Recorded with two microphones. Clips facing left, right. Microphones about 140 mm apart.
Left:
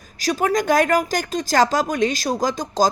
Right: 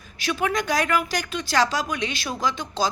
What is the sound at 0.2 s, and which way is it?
Speech, 40° left (ahead or behind).